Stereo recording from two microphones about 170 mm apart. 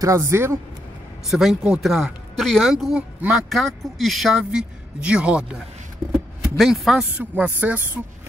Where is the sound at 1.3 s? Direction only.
5° right (ahead or behind).